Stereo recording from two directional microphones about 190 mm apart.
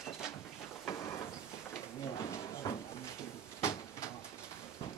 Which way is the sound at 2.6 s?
20° left (ahead or behind).